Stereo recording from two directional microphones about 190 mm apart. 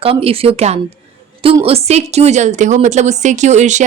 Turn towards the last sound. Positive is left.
turn(degrees=-40)  # may be behind; listen again after turning